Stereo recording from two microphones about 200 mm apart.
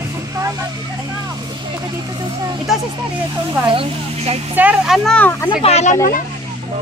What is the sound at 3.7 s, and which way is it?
Speech, 25° right (ahead or behind).